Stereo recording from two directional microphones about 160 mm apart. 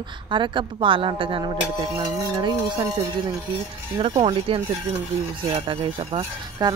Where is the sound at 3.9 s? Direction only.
30° right (ahead or behind).